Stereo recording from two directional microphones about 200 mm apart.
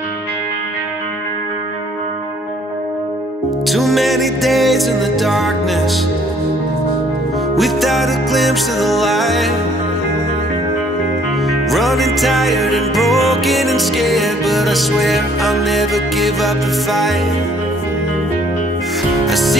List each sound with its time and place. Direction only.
3.6 s music: centre (ahead or behind)
7.5 s music: centre (ahead or behind)
11.7 s music: centre (ahead or behind)
19.2 s music: centre (ahead or behind)